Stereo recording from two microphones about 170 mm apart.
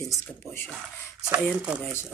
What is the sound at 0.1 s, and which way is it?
Speech, 15° left (ahead or behind).